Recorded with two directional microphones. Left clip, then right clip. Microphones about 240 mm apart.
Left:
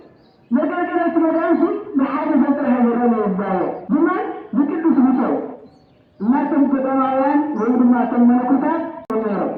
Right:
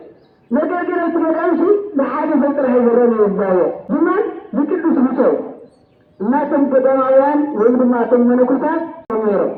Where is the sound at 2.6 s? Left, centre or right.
Right.